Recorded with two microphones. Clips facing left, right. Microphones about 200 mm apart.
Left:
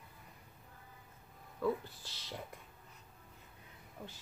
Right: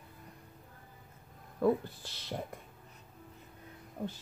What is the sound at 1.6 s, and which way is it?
Speech, 55° right (ahead or behind).